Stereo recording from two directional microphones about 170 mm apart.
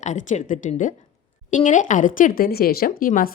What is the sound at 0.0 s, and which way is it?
Speech, 45° left (ahead or behind).